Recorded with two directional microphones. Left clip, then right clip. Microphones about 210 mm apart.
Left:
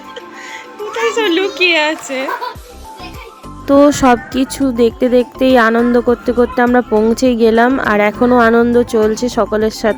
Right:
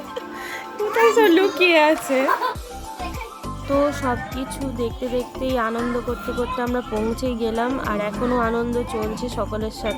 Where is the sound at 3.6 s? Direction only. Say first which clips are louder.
Left 12 dB; 40° left (ahead or behind).